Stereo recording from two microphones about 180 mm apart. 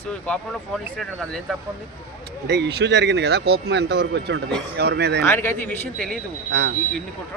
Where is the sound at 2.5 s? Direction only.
65° right (ahead or behind).